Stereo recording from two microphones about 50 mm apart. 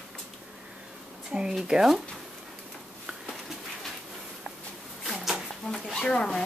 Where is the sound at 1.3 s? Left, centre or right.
Centre.